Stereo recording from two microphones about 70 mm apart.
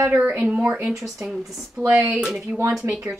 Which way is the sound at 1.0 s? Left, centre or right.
Centre.